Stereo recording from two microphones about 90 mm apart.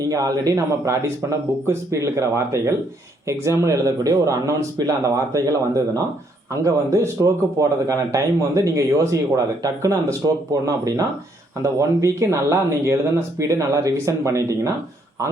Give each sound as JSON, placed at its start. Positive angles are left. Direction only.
{"t": 0.0, "sound": "a man's voice", "side_deg": -40}